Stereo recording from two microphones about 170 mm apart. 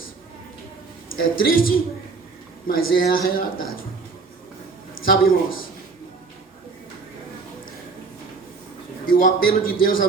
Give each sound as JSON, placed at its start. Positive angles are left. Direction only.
{"t": 1.2, "sound": "a man's voice", "side_deg": 60}
{"t": 5.0, "sound": "a man's voice", "side_deg": 60}
{"t": 9.0, "sound": "a man's voice", "side_deg": 60}